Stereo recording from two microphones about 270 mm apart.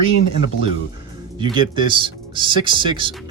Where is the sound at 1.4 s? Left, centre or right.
Centre.